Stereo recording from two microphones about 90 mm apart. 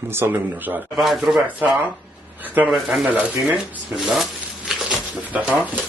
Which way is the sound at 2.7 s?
5° right (ahead or behind).